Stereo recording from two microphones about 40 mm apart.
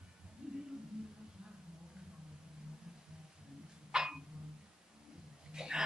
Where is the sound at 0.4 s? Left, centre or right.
Right.